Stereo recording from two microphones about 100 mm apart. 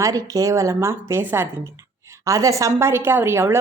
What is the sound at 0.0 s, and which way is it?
Speech, 35° right (ahead or behind).